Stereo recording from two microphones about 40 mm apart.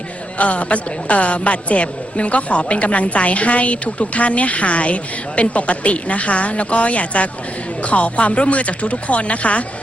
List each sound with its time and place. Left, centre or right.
0.3 s a woman's voice: left